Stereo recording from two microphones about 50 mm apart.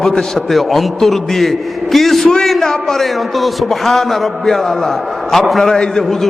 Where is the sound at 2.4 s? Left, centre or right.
Centre.